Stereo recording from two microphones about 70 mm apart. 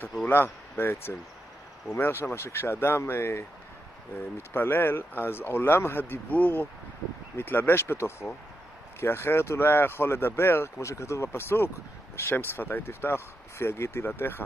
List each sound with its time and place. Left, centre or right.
0.3 s speech: left